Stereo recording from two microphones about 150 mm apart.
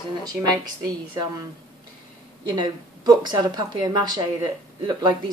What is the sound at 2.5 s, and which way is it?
A woman's voice, 30° right (ahead or behind).